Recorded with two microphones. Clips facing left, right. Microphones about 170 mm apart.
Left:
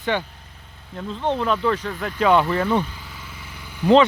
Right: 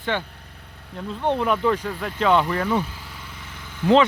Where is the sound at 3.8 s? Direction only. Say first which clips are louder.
Left 2 dB; 15° left (ahead or behind).